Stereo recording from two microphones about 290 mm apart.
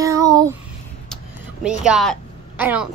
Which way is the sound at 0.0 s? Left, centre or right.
Centre.